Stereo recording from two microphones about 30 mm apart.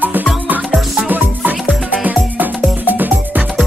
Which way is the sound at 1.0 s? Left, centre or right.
Right.